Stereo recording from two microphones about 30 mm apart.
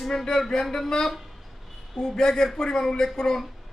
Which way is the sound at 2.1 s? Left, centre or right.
Left.